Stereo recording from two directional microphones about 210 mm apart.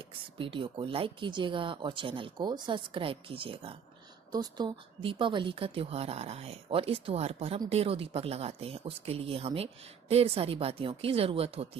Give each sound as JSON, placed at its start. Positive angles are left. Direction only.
{"t": 0.0, "sound": "speech", "side_deg": -25}